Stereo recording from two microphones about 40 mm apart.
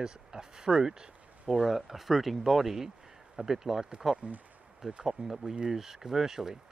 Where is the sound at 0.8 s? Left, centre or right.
Centre.